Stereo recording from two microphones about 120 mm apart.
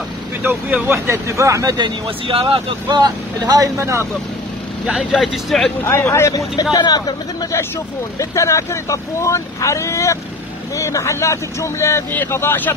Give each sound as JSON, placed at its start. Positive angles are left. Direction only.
{"t": 0.4, "sound": "speech", "side_deg": -15}
{"t": 2.0, "sound": "speech", "side_deg": -50}
{"t": 2.9, "sound": "speech", "side_deg": -30}
{"t": 4.8, "sound": "speech", "side_deg": 0}
{"t": 5.9, "sound": "speech", "side_deg": 20}
{"t": 8.2, "sound": "speech", "side_deg": 25}